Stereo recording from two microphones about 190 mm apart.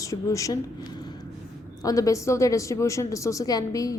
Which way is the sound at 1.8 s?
15° left (ahead or behind).